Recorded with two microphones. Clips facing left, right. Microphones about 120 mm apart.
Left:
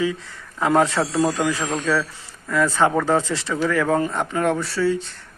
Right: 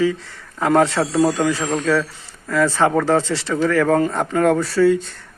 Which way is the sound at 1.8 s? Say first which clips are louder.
Right 3 dB; 40° right (ahead or behind).